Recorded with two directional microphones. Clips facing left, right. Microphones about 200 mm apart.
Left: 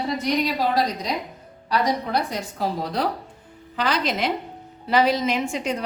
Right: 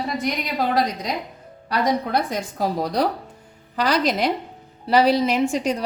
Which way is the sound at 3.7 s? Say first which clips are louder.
Right 3 dB; 40° right (ahead or behind).